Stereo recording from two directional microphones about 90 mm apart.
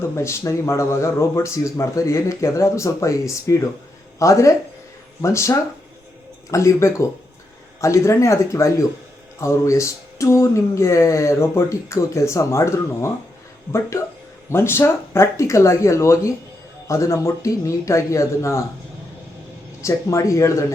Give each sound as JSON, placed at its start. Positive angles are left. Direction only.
{"t": 0.2, "sound": "speech", "side_deg": 30}
{"t": 14.5, "sound": "speech", "side_deg": 25}
{"t": 19.8, "sound": "speech", "side_deg": 35}